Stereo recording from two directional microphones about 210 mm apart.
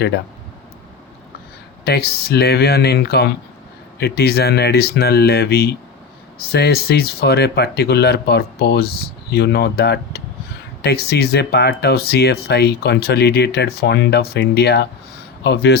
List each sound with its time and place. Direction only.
1.8 s speech: 50° left (ahead or behind)